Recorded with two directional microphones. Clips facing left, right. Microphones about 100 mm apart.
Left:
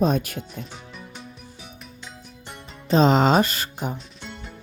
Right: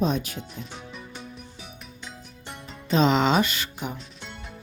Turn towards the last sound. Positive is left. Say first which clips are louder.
# left 3 dB
turn(degrees=40)  # may be behind; listen again after turning